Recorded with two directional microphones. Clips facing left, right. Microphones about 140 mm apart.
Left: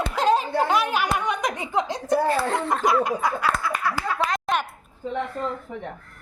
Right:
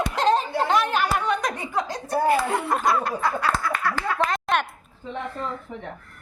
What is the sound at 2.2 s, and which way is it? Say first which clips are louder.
Chuckle: right 1 dB; 10° right (ahead or behind).